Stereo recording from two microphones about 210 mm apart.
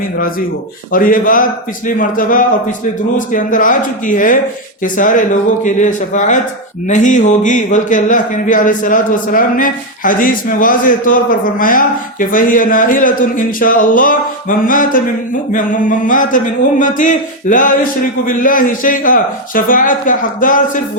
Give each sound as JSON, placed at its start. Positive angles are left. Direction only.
{"t": 0.9, "sound": "speech", "side_deg": 40}